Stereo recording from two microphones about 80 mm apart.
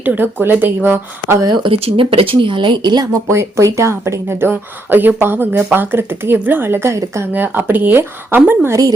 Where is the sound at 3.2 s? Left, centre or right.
Right.